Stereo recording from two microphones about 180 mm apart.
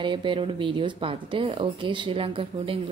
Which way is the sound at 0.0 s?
25° right (ahead or behind).